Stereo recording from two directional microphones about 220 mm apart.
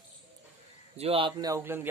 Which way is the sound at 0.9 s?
25° right (ahead or behind).